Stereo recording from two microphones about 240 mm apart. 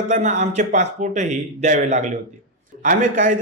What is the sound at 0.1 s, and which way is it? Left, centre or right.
Speech, right.